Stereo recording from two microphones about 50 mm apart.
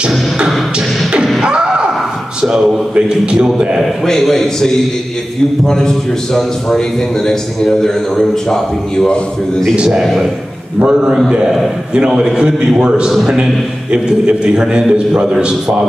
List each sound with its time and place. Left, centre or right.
1.4 s a sound: centre
2.9 s a man's voice: centre
4.0 s a man's voice: centre
10.8 s a man's voice: centre